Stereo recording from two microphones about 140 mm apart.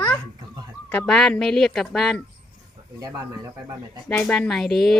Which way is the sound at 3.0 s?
25° right (ahead or behind).